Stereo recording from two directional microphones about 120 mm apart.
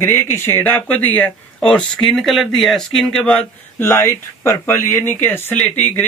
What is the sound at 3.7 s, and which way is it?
A man's voice, 20° left (ahead or behind).